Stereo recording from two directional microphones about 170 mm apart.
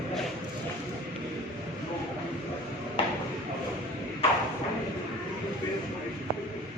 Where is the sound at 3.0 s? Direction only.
30° left (ahead or behind).